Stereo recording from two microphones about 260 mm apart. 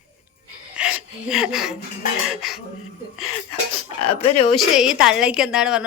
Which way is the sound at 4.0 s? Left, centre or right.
Left.